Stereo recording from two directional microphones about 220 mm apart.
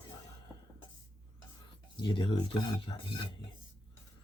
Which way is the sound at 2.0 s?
25° left (ahead or behind).